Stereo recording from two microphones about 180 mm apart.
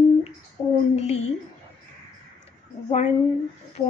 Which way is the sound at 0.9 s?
35° left (ahead or behind).